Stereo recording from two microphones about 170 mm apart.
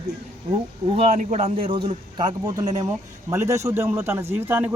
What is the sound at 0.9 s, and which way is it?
A man's voice, 35° right (ahead or behind).